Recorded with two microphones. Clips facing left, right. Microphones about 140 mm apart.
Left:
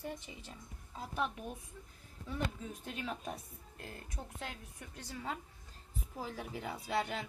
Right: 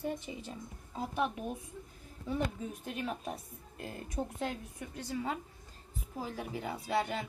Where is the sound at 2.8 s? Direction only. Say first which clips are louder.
Right 3 dB; 5° right (ahead or behind).